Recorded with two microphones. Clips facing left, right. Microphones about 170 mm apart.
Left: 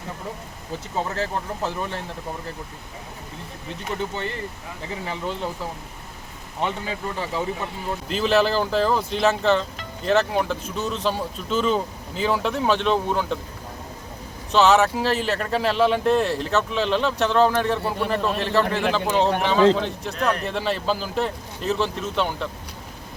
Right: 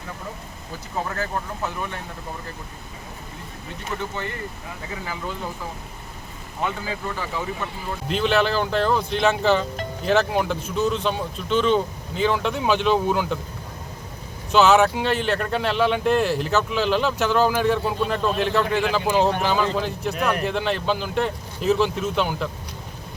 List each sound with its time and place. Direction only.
0.9 s speech: 25° left (ahead or behind)
4.1 s speech: 30° left (ahead or behind)
6.6 s speech: 25° left (ahead or behind)
8.1 s speech: centre (ahead or behind)
14.5 s speech: centre (ahead or behind)